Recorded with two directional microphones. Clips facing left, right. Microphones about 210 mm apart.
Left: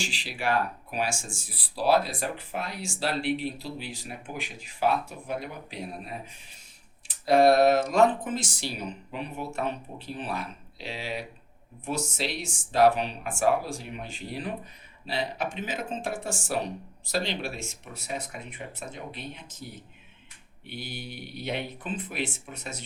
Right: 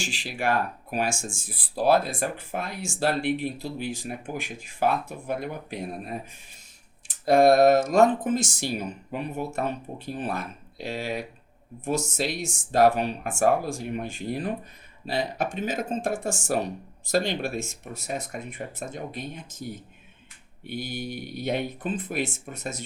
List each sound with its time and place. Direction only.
0.0 s speech: 50° right (ahead or behind)